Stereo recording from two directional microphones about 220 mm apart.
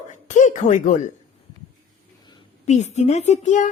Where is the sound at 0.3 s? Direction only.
35° left (ahead or behind).